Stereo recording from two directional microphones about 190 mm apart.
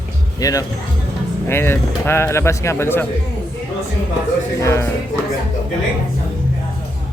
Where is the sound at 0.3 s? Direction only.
20° left (ahead or behind).